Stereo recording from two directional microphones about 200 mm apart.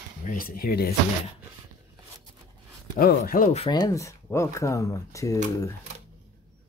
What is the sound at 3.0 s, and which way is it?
Speech, 50° left (ahead or behind).